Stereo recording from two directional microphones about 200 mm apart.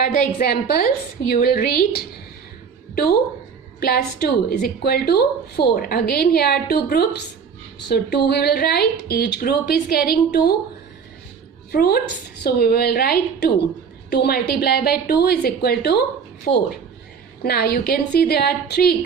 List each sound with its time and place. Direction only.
0.0 s a woman's voice: 50° left (ahead or behind)
11.7 s a woman's voice: 50° left (ahead or behind)